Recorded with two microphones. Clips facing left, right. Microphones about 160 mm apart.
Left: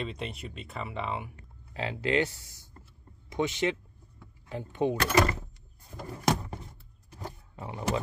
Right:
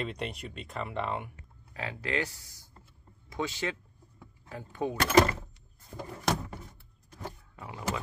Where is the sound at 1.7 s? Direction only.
25° left (ahead or behind).